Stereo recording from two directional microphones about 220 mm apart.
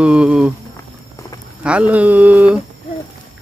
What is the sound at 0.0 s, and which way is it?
Speech, 5° right (ahead or behind).